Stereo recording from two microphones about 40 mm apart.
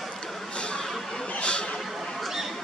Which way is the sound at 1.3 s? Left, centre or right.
Left.